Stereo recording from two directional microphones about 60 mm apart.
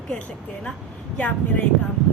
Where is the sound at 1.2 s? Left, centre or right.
Left.